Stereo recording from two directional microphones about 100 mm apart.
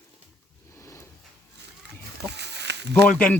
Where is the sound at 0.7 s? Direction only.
30° left (ahead or behind).